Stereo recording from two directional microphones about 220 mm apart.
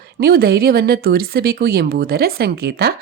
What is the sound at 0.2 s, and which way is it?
Speech, 45° right (ahead or behind).